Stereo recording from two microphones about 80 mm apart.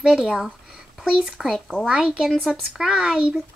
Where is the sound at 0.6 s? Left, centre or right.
Centre.